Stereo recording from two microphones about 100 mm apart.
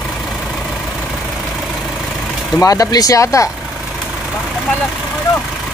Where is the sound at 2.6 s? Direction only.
40° left (ahead or behind).